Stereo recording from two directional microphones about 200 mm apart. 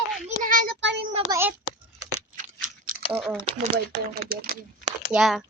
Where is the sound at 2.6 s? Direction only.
45° right (ahead or behind).